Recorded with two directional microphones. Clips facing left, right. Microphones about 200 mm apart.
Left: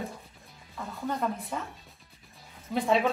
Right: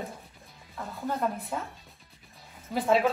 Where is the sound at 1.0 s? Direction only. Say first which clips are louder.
Right 1 dB; centre (ahead or behind).